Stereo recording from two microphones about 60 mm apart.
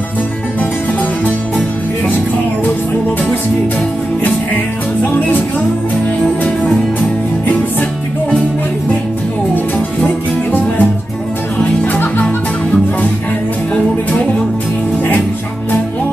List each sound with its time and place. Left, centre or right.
10.0 s music: left